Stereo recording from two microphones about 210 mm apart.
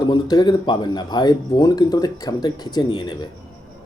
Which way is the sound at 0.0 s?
20° left (ahead or behind).